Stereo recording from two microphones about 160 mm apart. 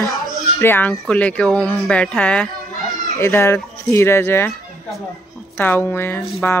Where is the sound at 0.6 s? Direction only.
10° left (ahead or behind).